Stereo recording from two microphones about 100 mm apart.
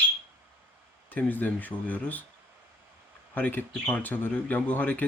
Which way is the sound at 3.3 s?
20° left (ahead or behind).